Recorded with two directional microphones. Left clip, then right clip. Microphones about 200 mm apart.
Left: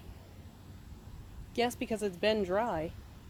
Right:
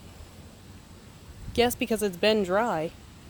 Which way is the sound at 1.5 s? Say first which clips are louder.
Right 8 dB; 25° right (ahead or behind).